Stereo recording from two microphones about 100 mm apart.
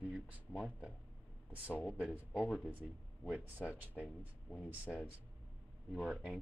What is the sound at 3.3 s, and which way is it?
Speech, 15° right (ahead or behind).